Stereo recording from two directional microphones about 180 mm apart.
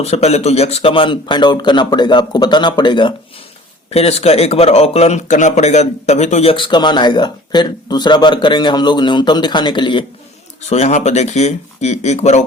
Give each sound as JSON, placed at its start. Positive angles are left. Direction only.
{"t": 0.0, "sound": "speech", "side_deg": 35}
{"t": 10.7, "sound": "speech", "side_deg": 40}